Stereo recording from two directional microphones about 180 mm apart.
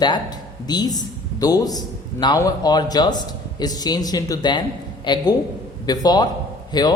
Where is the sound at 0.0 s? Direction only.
25° left (ahead or behind).